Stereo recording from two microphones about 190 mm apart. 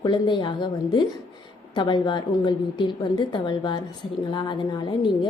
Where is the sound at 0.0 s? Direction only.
25° left (ahead or behind).